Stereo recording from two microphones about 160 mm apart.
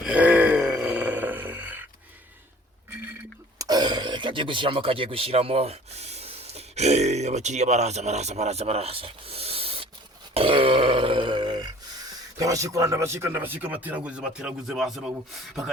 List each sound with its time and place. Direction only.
0.0 s a sound: 10° right (ahead or behind)
3.6 s speech: 25° right (ahead or behind)
10.3 s grunt: 35° right (ahead or behind)
12.4 s speech: 20° right (ahead or behind); by 15.1 s centre (ahead or behind)